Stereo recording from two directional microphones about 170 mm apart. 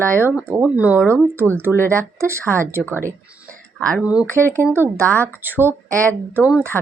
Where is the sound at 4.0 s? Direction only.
5° right (ahead or behind).